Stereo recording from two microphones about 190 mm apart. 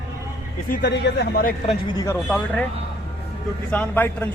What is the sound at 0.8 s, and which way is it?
Speech, 60° left (ahead or behind).